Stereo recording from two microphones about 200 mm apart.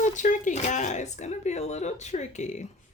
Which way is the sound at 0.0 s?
40° left (ahead or behind).